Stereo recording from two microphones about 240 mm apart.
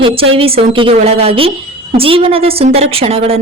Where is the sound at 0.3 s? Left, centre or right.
Right.